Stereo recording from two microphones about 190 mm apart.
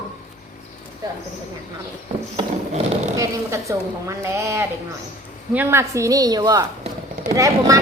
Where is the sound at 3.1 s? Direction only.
15° right (ahead or behind).